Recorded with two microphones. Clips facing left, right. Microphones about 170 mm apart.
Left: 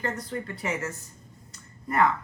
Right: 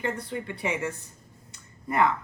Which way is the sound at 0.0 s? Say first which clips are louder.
Right 1 dB; 15° right (ahead or behind).